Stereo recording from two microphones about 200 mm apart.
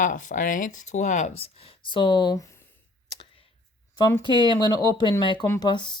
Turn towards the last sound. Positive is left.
turn(degrees=20)  # may be behind; listen again after turning